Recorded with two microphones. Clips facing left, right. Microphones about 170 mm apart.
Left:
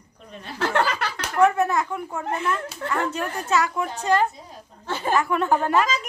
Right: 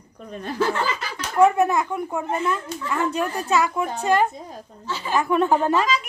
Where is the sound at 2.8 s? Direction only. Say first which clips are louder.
Left 1 dB; 65° left (ahead or behind).